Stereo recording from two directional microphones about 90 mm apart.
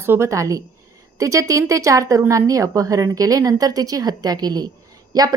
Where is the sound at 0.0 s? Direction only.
30° right (ahead or behind).